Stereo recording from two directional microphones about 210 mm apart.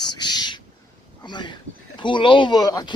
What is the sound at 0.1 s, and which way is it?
Bird, 20° left (ahead or behind).